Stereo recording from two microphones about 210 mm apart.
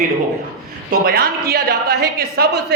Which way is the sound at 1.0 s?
45° right (ahead or behind).